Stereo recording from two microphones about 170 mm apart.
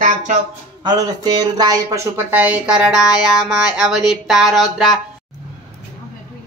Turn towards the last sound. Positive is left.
turn(degrees=0)  # may be behind; listen again after turning